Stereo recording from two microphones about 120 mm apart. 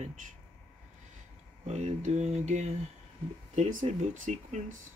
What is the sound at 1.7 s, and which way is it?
Speech, 70° right (ahead or behind).